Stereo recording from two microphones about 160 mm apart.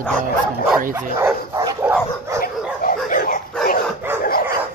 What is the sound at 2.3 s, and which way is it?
Dog, 65° left (ahead or behind).